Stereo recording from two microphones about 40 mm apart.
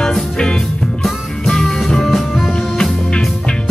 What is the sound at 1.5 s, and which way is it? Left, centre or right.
Music, centre.